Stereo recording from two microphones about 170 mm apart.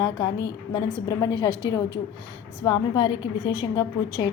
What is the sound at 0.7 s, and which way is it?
A woman's voice, 25° left (ahead or behind).